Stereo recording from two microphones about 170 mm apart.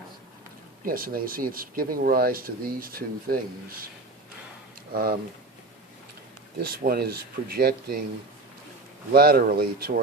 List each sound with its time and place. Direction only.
0.9 s speech: 55° right (ahead or behind)
4.9 s speech: 60° right (ahead or behind)
6.6 s speech: 60° right (ahead or behind)
9.1 s speech: 65° right (ahead or behind)